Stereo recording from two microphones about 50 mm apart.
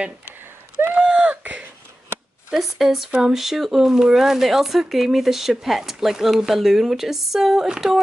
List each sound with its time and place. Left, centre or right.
0.9 s a sound: right
2.5 s speech: centre
3.3 s speech: centre